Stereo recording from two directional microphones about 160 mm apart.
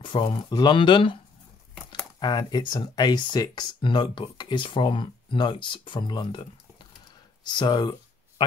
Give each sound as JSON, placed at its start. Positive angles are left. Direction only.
{"t": 0.0, "sound": "speech", "side_deg": 30}
{"t": 7.4, "sound": "speech", "side_deg": 30}